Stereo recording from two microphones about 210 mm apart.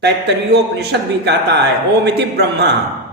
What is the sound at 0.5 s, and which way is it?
A man's voice, 55° right (ahead or behind).